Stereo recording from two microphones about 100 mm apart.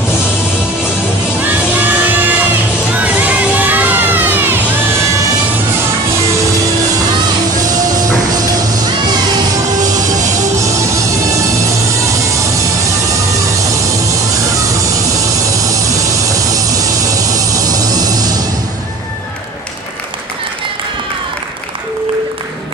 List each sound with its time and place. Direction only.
1.4 s music: 15° right (ahead or behind)
2.9 s children shouting: 15° right (ahead or behind)
7.6 s music: 40° right (ahead or behind)
10.6 s music: 30° right (ahead or behind)
16.3 s music: 35° right (ahead or behind)